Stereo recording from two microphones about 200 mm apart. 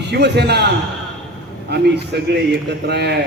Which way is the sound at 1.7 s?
55° right (ahead or behind).